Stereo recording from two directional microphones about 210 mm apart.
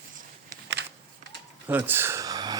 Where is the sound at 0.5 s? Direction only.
15° left (ahead or behind).